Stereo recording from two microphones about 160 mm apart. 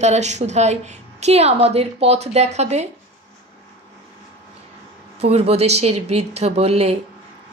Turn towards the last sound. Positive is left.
turn(degrees=-40)  # may be behind; listen again after turning